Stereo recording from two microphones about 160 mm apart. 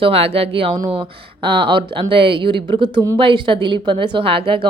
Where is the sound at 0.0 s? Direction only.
40° right (ahead or behind).